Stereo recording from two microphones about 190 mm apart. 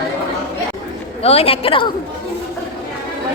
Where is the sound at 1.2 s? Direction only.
30° left (ahead or behind).